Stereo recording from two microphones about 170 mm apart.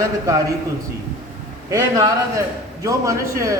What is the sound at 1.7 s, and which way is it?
A man's voice, 15° right (ahead or behind).